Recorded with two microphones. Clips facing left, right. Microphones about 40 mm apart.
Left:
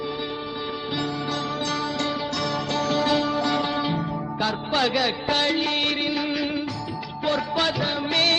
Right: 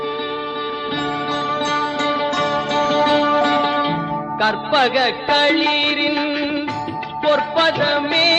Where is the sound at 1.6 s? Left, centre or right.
Right.